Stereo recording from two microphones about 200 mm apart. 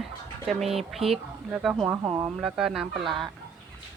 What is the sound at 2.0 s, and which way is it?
Speech, 15° right (ahead or behind).